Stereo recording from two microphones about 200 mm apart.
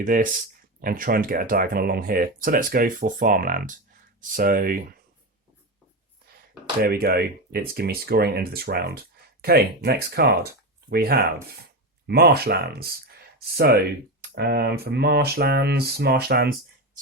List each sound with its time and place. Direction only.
0.0 s speech: 45° right (ahead or behind)
6.8 s speech: 50° right (ahead or behind)
14.2 s speech: 50° right (ahead or behind)